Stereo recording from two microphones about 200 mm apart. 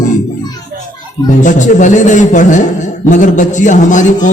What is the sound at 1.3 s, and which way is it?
A man's voice, 40° left (ahead or behind).